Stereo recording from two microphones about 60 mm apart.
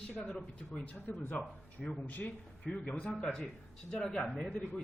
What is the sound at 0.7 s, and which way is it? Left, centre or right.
A man's voice, left.